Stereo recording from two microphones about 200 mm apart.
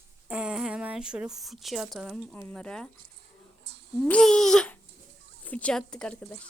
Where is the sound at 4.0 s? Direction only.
5° left (ahead or behind).